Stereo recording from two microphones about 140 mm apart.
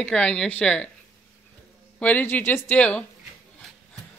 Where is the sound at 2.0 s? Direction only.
10° left (ahead or behind).